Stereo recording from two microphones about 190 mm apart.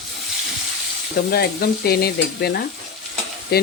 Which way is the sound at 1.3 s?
55° left (ahead or behind).